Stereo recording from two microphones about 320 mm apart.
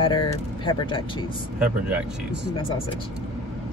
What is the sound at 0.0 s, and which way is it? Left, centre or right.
Speech, centre.